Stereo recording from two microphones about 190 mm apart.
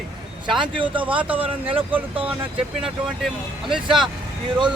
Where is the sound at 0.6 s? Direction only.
25° right (ahead or behind).